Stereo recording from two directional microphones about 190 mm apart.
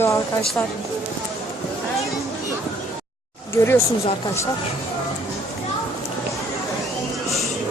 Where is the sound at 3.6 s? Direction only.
20° left (ahead or behind).